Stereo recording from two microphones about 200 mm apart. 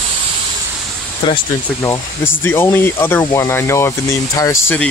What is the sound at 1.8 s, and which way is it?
Speech, 10° left (ahead or behind).